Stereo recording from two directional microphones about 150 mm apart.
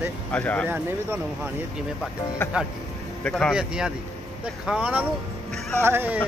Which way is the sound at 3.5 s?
5° right (ahead or behind).